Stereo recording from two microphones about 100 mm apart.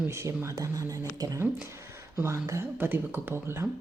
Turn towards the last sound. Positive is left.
turn(degrees=-25)  # may be behind; listen again after turning